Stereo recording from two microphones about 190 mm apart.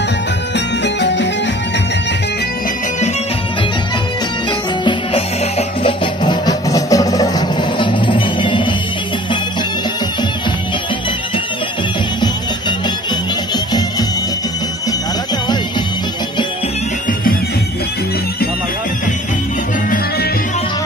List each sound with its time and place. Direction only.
0.8 s music: 65° left (ahead or behind)
5.9 s music: 20° left (ahead or behind)